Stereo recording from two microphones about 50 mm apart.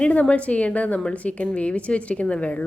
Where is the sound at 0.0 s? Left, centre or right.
Left.